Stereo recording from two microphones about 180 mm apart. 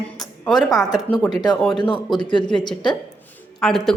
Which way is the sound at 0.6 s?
20° left (ahead or behind).